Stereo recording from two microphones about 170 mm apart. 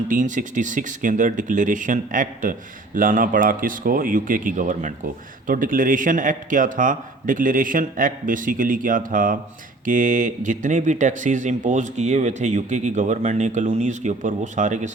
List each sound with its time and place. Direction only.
0.1 s speech: 50° right (ahead or behind)